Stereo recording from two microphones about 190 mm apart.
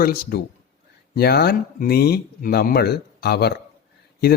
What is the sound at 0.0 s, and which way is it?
A man's voice, 50° left (ahead or behind).